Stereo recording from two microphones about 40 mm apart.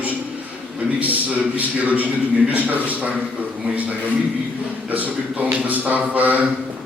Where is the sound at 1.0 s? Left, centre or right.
Right.